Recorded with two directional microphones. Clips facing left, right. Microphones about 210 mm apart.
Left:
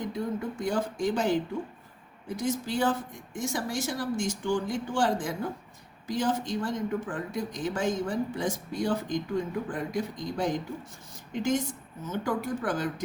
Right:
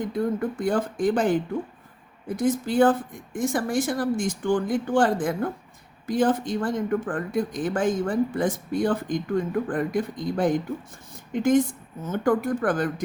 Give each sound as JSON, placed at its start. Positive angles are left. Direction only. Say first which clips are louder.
{"t": 0.1, "sound": "speech", "louder": "right 6 dB", "side_deg": -55}